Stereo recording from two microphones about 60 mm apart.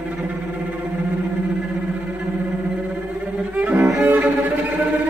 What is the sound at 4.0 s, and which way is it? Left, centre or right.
Cello, right.